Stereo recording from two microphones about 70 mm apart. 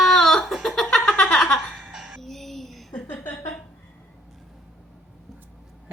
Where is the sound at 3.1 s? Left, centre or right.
Left.